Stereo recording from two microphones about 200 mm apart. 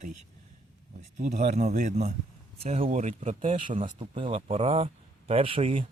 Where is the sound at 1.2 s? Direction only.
35° right (ahead or behind).